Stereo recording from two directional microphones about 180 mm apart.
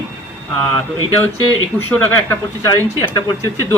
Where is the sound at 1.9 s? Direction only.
15° left (ahead or behind).